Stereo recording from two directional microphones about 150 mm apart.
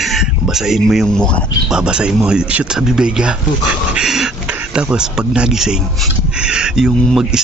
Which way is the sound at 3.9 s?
5° right (ahead or behind).